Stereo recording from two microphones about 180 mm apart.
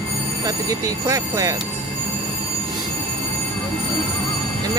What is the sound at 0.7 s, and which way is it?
Speech, 20° right (ahead or behind).